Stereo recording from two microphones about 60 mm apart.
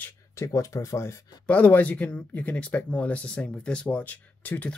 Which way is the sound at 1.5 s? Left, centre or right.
Left.